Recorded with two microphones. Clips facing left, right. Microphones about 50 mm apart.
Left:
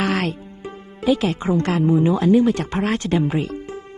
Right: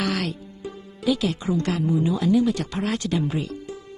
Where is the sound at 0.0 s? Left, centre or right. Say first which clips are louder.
Left 4 dB; left.